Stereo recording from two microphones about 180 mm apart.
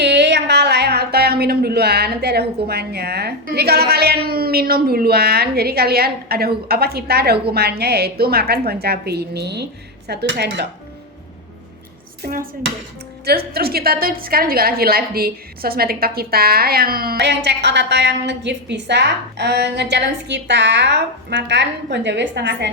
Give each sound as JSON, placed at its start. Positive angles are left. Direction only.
{"t": 0.0, "sound": "a woman's voice", "side_deg": -70}
{"t": 12.2, "sound": "a woman's voice", "side_deg": -60}